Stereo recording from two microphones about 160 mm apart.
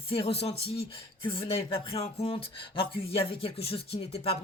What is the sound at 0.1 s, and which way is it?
Speech, 35° left (ahead or behind).